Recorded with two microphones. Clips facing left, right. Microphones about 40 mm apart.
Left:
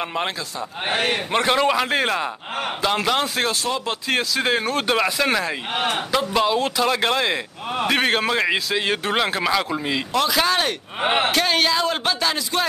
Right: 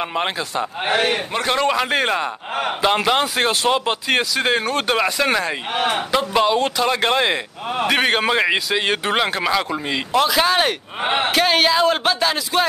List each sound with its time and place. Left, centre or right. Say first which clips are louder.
0.0 s a man's voice: right 3 dB; centre
3.4 s speech: right 5 dB; right
4.1 s a man's voice: right 2 dB; centre
11.0 s a man's voice: left 1 dB; centre
11.3 s a man's voice: right 3 dB; centre